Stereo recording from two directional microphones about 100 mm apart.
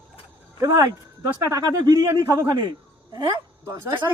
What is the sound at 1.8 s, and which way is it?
Speech, 40° right (ahead or behind).